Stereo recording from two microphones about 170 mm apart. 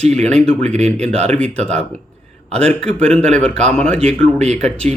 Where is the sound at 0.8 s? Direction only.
40° right (ahead or behind).